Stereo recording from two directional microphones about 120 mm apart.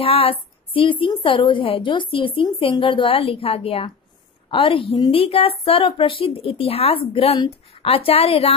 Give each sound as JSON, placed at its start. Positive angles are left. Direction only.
{"t": 0.0, "sound": "a woman's voice", "side_deg": 50}